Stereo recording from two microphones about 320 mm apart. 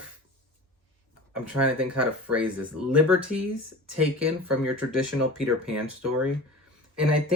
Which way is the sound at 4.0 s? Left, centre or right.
Centre.